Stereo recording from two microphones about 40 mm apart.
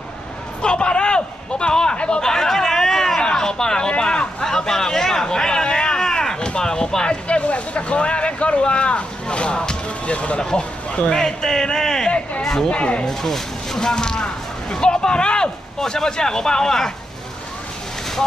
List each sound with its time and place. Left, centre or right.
0.6 s a sound: left
3.2 s vehicle: centre
11.1 s speech: centre
12.6 s speech: left
13.0 s speech: centre